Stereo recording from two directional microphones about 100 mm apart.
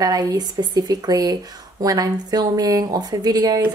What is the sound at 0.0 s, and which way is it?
Speech, 40° right (ahead or behind).